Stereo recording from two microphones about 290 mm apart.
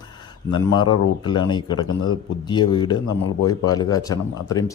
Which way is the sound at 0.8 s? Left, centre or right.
Centre.